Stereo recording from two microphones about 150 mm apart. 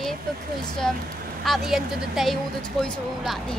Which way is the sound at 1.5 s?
Centre (ahead or behind).